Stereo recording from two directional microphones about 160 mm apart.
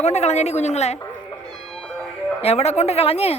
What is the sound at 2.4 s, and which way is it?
Speech, 40° left (ahead or behind).